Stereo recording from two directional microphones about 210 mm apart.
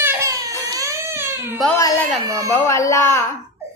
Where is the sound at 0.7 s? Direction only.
15° right (ahead or behind).